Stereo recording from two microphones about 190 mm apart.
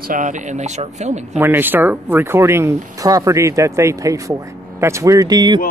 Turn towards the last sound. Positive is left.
turn(degrees=-20)  # may be behind; listen again after turning